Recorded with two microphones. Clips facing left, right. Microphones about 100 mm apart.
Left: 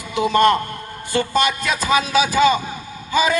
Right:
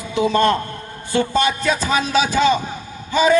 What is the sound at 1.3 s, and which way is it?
Speech, 70° left (ahead or behind).